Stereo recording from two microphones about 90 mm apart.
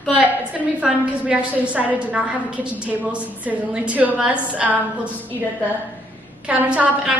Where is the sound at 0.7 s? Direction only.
15° right (ahead or behind).